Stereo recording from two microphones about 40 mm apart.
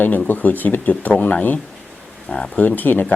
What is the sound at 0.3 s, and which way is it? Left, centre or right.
Speech, left.